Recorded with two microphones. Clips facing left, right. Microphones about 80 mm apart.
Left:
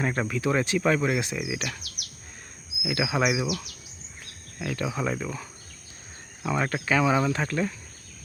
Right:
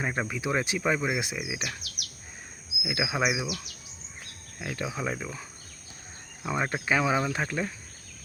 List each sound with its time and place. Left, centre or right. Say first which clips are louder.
0.0 s speech: left 4 dB; centre
2.8 s speech: left 3 dB; centre
4.6 s speech: left 3 dB; centre
6.4 s speech: left 2 dB; centre